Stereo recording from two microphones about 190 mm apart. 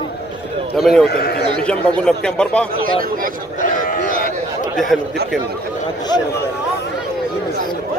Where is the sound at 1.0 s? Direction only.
55° left (ahead or behind).